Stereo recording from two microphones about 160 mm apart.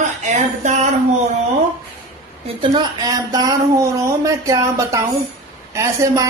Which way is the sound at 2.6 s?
25° right (ahead or behind).